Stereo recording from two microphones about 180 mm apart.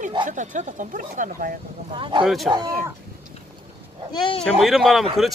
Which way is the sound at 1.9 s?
30° right (ahead or behind).